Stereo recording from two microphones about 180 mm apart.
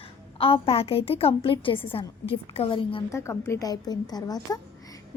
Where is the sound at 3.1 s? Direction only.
15° left (ahead or behind).